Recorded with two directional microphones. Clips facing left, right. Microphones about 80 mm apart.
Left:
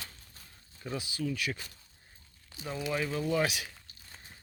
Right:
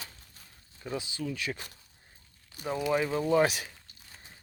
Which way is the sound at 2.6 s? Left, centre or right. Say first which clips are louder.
Right 5 dB; centre.